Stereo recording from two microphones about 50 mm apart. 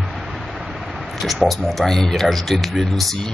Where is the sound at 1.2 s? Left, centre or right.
Centre.